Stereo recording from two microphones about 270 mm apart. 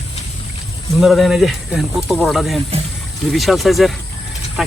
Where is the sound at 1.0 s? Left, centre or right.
Centre.